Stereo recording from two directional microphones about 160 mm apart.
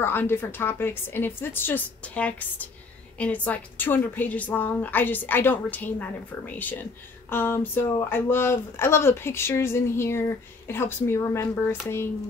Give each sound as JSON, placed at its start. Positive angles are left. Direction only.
{"t": 0.0, "sound": "a woman's voice", "side_deg": 15}